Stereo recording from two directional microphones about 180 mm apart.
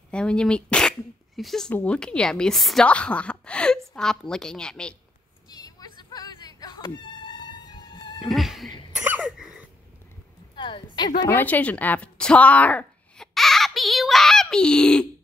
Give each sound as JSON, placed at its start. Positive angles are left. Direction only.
{"t": 0.1, "sound": "speech", "side_deg": 5}
{"t": 5.5, "sound": "music", "side_deg": 20}
{"t": 8.2, "sound": "a sound", "side_deg": 0}
{"t": 9.0, "sound": "cough", "side_deg": -10}
{"t": 10.5, "sound": "a sound", "side_deg": 25}
{"t": 11.1, "sound": "speech", "side_deg": 10}